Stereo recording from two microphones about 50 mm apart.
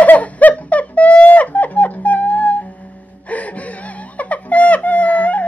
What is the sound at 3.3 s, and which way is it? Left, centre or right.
Whimper, left.